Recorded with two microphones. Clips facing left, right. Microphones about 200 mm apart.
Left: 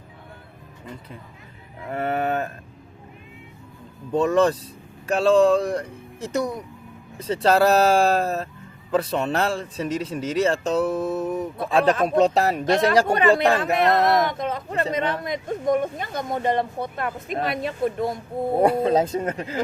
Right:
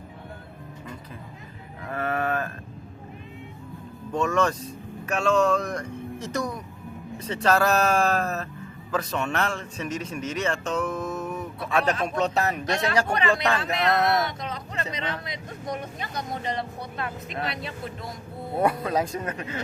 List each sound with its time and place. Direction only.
1.9 s speech: 30° left (ahead or behind)
4.1 s speech: 30° left (ahead or behind); by 18.2 s 45° left (ahead or behind)
18.6 s speech: 30° left (ahead or behind)